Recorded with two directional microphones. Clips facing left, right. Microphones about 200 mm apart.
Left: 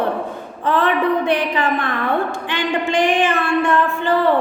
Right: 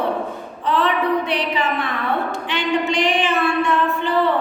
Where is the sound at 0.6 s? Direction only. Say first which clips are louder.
Left 2 dB; 50° left (ahead or behind).